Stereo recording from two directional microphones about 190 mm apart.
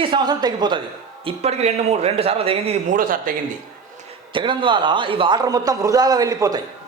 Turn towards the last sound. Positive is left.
turn(degrees=-15)  # may be behind; listen again after turning